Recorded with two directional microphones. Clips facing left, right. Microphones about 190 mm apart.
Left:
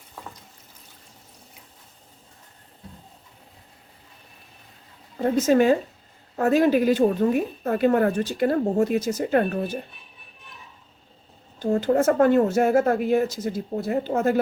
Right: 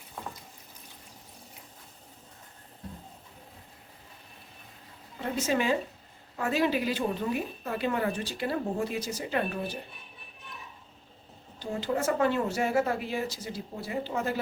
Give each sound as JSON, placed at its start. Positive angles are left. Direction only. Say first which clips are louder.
{"t": 5.1, "sound": "a woman's voice", "louder": "left 10 dB", "side_deg": 45}
{"t": 11.6, "sound": "speech", "louder": "left 10 dB", "side_deg": 50}